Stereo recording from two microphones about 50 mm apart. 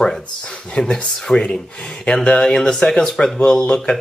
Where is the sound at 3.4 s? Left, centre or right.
Centre.